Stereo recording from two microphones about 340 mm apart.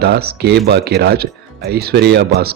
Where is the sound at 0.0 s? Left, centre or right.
Right.